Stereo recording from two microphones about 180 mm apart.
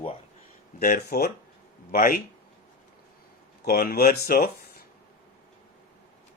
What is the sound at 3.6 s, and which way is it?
Speech, 55° left (ahead or behind).